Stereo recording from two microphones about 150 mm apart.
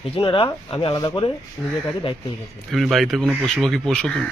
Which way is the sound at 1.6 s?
10° left (ahead or behind).